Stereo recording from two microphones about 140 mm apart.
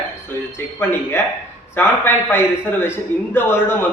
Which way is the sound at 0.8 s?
15° left (ahead or behind).